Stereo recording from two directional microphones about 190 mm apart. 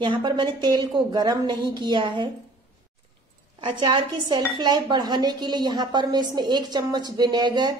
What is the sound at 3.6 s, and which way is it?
Speech, 25° right (ahead or behind).